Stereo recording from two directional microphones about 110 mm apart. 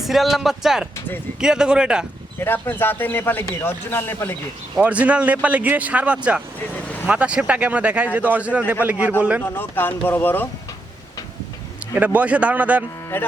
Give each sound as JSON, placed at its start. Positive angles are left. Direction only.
{"t": 0.0, "sound": "a man's voice", "side_deg": 0}
{"t": 2.4, "sound": "a man's voice", "side_deg": 20}
{"t": 4.8, "sound": "a man's voice", "side_deg": -15}
{"t": 9.4, "sound": "a man's voice", "side_deg": 20}
{"t": 11.9, "sound": "a man's voice", "side_deg": -15}
{"t": 13.1, "sound": "speech", "side_deg": 20}